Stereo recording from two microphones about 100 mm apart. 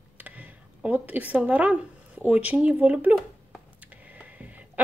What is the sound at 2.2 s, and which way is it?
Speech, 15° right (ahead or behind).